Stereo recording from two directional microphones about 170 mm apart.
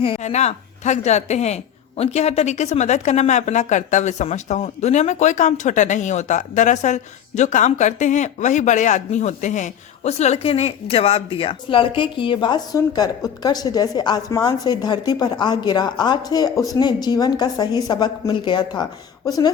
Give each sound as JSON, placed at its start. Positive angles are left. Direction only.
{"t": 0.0, "sound": "a woman's voice", "side_deg": 35}